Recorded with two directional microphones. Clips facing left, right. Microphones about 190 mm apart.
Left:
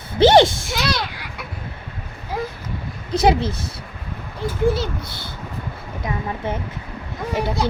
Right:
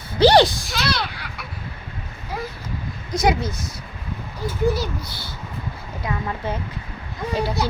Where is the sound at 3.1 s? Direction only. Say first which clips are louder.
Left 3 dB; 30° left (ahead or behind).